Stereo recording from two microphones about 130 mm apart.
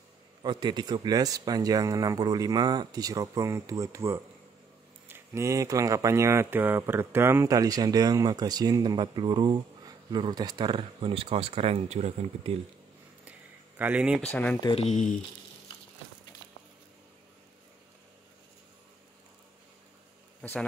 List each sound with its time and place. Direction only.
0.4 s speech: 35° right (ahead or behind); by 12.5 s 60° right (ahead or behind)
13.7 s speech: 10° right (ahead or behind)
14.3 s speech: 10° left (ahead or behind)
14.8 s speech: 65° left (ahead or behind)